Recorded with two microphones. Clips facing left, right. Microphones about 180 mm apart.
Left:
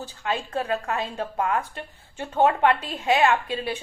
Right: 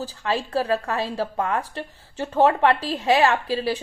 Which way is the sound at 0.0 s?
35° right (ahead or behind).